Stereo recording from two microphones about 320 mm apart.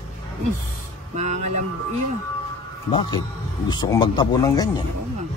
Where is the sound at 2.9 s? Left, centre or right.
Centre.